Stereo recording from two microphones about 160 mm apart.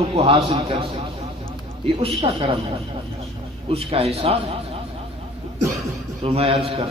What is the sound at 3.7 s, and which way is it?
Speech, 40° right (ahead or behind).